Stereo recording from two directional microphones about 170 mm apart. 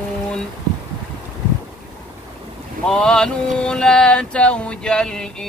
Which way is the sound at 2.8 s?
5° left (ahead or behind).